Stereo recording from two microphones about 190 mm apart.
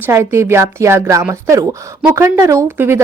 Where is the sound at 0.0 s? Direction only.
15° right (ahead or behind).